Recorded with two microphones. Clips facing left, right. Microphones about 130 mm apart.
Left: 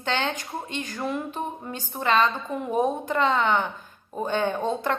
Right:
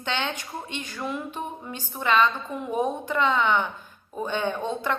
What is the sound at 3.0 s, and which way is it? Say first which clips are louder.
A woman's voice: left 1 dB; 40° left (ahead or behind).